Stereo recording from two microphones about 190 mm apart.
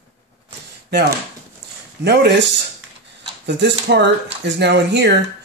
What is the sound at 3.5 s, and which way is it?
Speech, 65° right (ahead or behind).